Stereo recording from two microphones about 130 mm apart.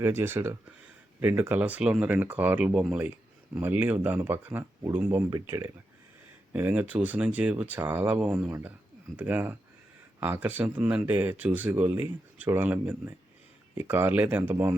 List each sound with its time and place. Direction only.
0.0 s speech: 20° right (ahead or behind)